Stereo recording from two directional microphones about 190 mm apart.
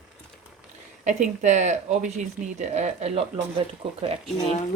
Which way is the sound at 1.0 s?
40° right (ahead or behind).